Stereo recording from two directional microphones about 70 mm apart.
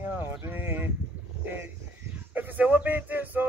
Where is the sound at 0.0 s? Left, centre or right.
Right.